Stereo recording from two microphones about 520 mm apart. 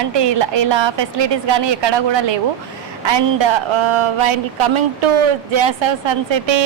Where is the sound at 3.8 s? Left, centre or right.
Right.